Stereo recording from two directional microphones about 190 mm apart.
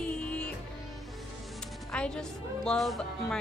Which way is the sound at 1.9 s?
5° left (ahead or behind).